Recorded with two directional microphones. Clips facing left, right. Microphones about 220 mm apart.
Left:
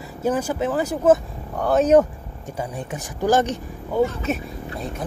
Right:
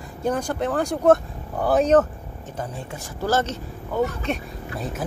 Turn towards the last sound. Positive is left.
turn(degrees=5)  # may be behind; listen again after turning